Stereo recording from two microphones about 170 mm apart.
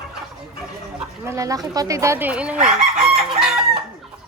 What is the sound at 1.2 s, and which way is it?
Speech, 15° right (ahead or behind).